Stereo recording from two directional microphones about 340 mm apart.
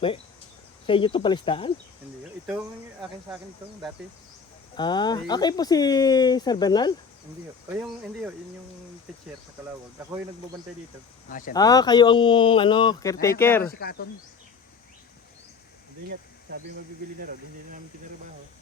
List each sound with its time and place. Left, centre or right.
0.9 s speech: centre
4.7 s speech: centre
7.7 s speech: centre
11.3 s speech: left
11.5 s speech: centre
13.7 s speech: left
17.2 s speech: right